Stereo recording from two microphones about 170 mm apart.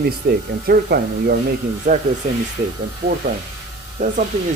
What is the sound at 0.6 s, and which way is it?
Speech, 60° right (ahead or behind).